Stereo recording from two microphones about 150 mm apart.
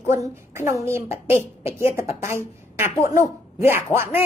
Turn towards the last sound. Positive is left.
turn(degrees=-15)  # may be behind; listen again after turning